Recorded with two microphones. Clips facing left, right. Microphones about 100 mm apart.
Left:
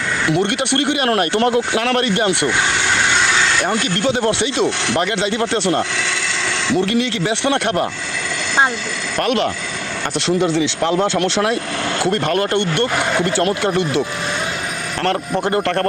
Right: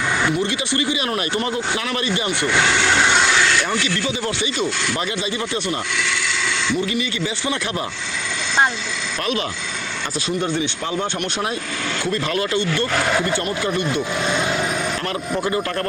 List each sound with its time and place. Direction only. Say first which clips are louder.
0.3 s speech: left 4 dB; 70° left (ahead or behind)
3.6 s speech: left 4 dB; 55° left (ahead or behind)
9.2 s speech: left 6 dB; 65° left (ahead or behind)
10.2 s speech: left 6 dB; 90° left
12.0 s speech: left 5 dB; 65° left (ahead or behind)
13.2 s speech: left 5 dB; 90° left
15.0 s speech: left 4 dB; 60° left (ahead or behind)